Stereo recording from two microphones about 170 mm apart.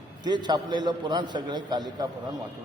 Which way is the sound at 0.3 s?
25° right (ahead or behind).